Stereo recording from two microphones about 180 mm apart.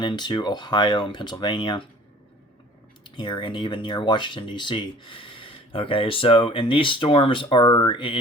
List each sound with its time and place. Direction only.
0.0 s speech: 25° left (ahead or behind)
3.0 s speech: 25° left (ahead or behind)